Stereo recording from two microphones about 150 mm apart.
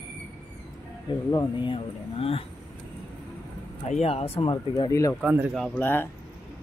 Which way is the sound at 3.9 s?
40° left (ahead or behind).